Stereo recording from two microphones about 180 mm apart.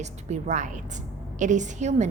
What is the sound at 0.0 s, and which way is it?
A woman's voice, 40° right (ahead or behind).